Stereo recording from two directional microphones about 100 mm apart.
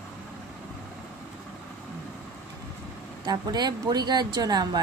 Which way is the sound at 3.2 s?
45° right (ahead or behind).